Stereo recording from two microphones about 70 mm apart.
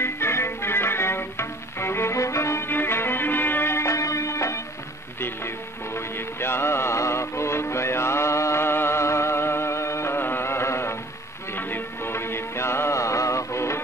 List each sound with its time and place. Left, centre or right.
0.0 s music: left
5.9 s music: left